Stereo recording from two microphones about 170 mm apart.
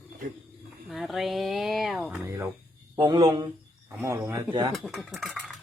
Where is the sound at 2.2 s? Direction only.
20° right (ahead or behind).